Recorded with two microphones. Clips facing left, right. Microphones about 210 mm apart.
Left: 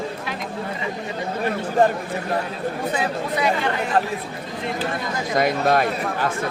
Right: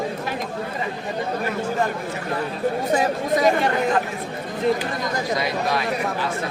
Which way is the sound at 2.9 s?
40° right (ahead or behind).